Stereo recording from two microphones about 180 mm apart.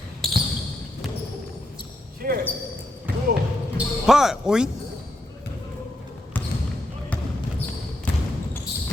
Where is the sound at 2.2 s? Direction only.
55° right (ahead or behind).